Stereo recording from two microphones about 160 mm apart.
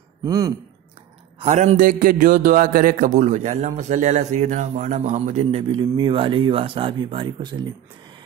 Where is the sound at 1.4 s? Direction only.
45° right (ahead or behind); by 7.7 s 30° right (ahead or behind).